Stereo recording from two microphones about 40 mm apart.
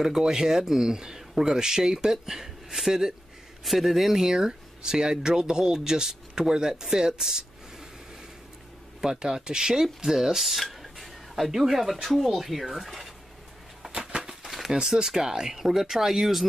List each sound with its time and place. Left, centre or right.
0.0 s speech: centre
3.6 s speech: centre
4.2 s speech: centre
9.0 s speech: centre
13.9 s a sound: right
14.4 s speech: centre